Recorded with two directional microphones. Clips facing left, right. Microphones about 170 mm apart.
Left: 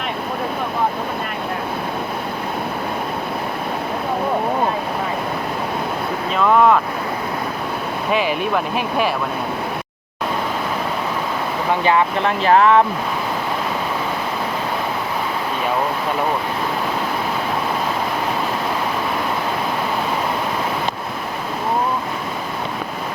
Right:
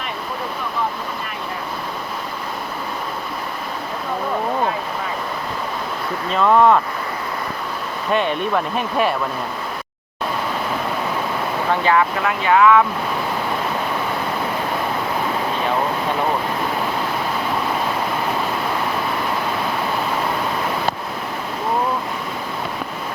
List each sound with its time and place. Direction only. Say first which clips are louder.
6.3 s speech: even; centre (ahead or behind)
8.1 s speech: even; 5° left (ahead or behind)
11.7 s speech: left 1 dB; 20° left (ahead or behind)